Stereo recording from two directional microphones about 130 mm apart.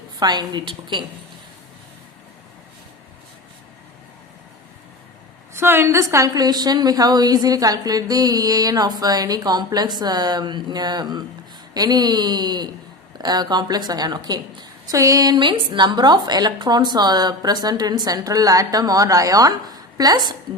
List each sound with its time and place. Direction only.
0.2 s a woman's voice: 35° right (ahead or behind)
5.5 s a woman's voice: 20° right (ahead or behind)